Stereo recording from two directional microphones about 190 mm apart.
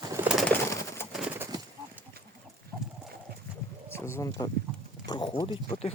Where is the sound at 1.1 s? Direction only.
10° right (ahead or behind).